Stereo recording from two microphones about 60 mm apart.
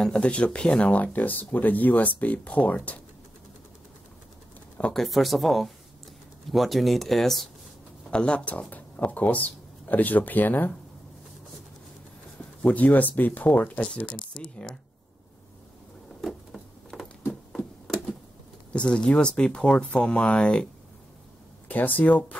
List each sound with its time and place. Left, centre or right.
0.0 s speech: centre
4.9 s speech: centre
8.1 s speech: centre
12.6 s speech: left
16.2 s a sound: centre
17.5 s typewriter: centre
18.7 s speech: centre
21.6 s speech: left